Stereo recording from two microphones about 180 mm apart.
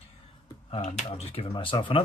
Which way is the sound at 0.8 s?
40° left (ahead or behind).